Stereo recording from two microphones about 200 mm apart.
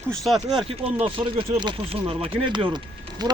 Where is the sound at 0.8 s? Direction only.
30° right (ahead or behind).